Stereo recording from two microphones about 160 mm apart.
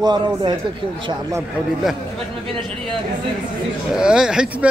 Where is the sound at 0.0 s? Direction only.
25° right (ahead or behind).